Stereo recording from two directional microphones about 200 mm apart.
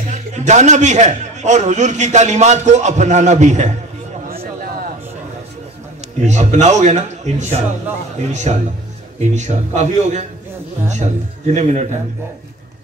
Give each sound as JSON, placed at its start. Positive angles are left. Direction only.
{"t": 0.1, "sound": "a man's voice", "side_deg": -35}
{"t": 6.2, "sound": "a man's voice", "side_deg": -35}